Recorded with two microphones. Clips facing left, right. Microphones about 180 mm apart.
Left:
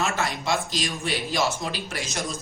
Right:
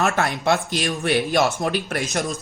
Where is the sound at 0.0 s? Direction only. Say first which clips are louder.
Right 6 dB; 60° right (ahead or behind).